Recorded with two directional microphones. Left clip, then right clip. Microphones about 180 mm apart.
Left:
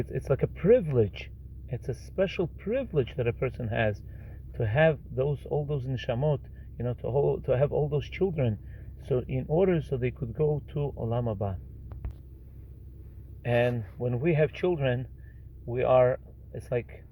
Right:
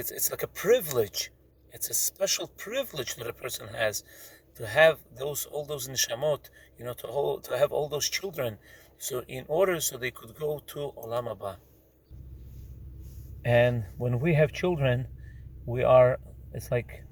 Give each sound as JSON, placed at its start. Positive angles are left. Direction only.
{"t": 0.0, "sound": "speech", "side_deg": -30}
{"t": 13.4, "sound": "speech", "side_deg": -25}